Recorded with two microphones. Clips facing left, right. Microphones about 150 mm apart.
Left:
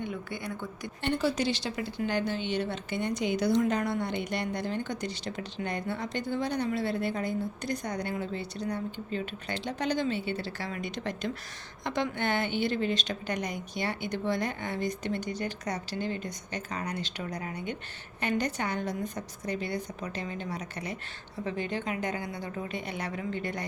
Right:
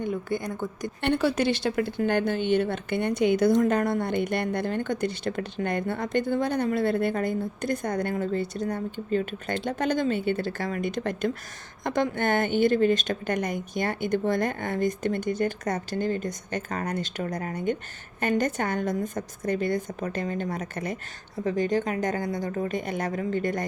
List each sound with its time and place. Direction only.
0.0 s a woman's voice: 45° right (ahead or behind)
1.0 s a woman's voice: 60° right (ahead or behind); by 23.6 s 45° right (ahead or behind)